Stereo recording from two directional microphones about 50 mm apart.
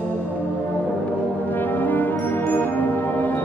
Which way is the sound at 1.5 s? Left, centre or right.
Left.